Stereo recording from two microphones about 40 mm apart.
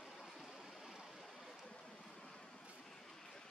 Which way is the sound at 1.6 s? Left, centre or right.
Centre.